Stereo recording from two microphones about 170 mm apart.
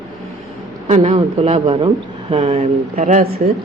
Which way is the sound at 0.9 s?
40° right (ahead or behind).